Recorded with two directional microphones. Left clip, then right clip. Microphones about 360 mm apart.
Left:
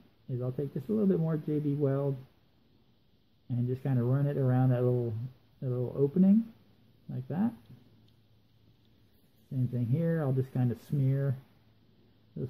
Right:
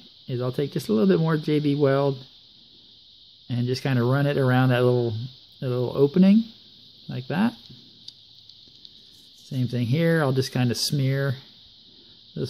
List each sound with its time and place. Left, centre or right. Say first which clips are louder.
0.3 s speech: right 9 dB; right
3.4 s speech: right 9 dB; right
9.7 s speech: right 10 dB; right